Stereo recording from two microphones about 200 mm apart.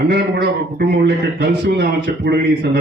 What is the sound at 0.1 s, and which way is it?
A man's voice, 50° right (ahead or behind).